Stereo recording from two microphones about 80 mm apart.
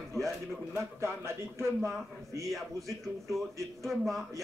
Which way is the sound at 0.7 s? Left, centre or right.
Right.